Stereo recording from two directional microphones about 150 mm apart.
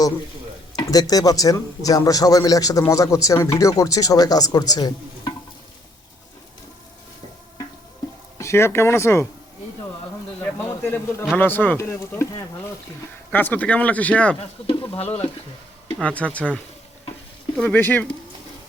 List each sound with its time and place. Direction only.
0.8 s a man's voice: 25° left (ahead or behind)
8.4 s speech: 20° left (ahead or behind)
10.4 s speech: 15° left (ahead or behind)
13.3 s speech: 10° left (ahead or behind)
14.7 s speech: 35° left (ahead or behind)
16.0 s speech: 10° left (ahead or behind)
17.6 s speech: 10° left (ahead or behind)